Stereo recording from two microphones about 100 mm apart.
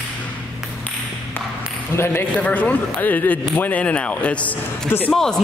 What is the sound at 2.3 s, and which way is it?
Speech, 15° left (ahead or behind).